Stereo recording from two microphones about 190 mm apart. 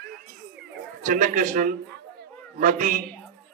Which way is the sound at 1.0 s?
40° right (ahead or behind).